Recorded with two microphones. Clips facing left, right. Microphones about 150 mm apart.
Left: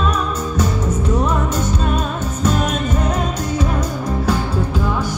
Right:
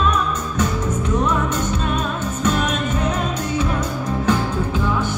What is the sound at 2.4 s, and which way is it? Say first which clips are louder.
Music: left 2 dB; 35° left (ahead or behind).